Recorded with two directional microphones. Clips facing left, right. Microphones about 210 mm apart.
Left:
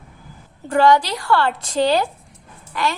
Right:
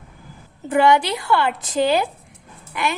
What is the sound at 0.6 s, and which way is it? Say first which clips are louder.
Speech: left 1 dB; 20° right (ahead or behind).